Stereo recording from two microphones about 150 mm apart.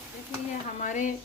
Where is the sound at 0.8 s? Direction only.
60° left (ahead or behind).